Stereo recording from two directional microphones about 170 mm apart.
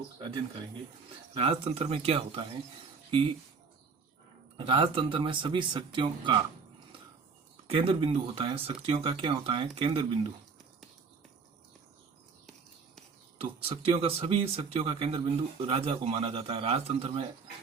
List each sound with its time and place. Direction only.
1.3 s speech: 35° right (ahead or behind)
4.5 s speech: 30° right (ahead or behind)
7.5 s speech: 30° right (ahead or behind)
13.4 s speech: 35° right (ahead or behind)